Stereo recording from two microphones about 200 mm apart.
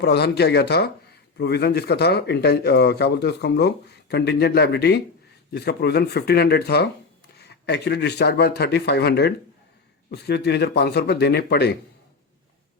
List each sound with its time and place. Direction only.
0.0 s speech: 55° left (ahead or behind)